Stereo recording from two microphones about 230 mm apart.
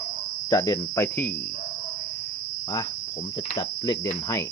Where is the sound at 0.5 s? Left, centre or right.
Centre.